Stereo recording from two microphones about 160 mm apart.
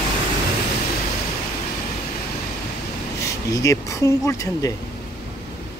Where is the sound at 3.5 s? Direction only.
20° left (ahead or behind).